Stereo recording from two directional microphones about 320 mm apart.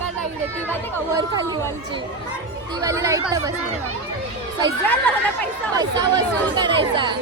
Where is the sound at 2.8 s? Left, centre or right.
Centre.